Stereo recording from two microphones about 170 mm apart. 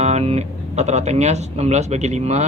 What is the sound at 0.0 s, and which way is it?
Speech, 40° right (ahead or behind).